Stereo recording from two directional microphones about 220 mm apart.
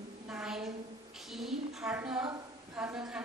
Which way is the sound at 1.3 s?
Centre (ahead or behind).